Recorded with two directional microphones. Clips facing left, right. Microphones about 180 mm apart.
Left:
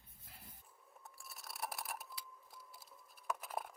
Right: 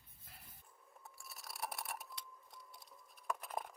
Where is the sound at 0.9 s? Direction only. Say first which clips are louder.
Even; centre (ahead or behind).